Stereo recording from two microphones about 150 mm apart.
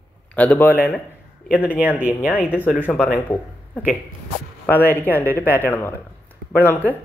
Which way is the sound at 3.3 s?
10° left (ahead or behind).